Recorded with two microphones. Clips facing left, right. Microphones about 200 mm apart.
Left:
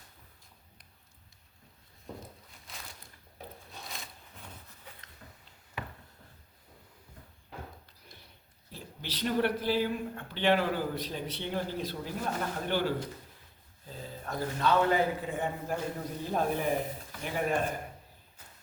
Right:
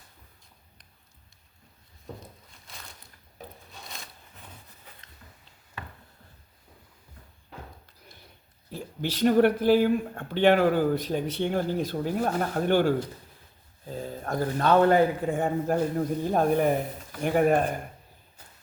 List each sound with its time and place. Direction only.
2.6 s a sound: centre (ahead or behind)
8.7 s speech: 50° right (ahead or behind)
14.0 s speech: 50° right (ahead or behind)